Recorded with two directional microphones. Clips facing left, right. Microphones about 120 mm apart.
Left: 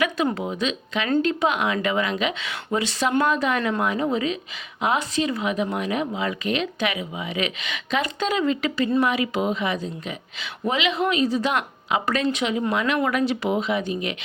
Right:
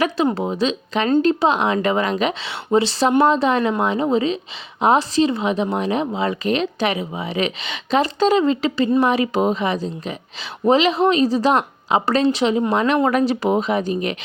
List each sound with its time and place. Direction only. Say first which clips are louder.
0.0 s a woman's voice: right 4 dB; 30° right (ahead or behind)